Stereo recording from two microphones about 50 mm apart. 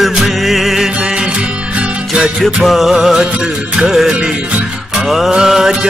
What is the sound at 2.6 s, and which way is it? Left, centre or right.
Music, centre.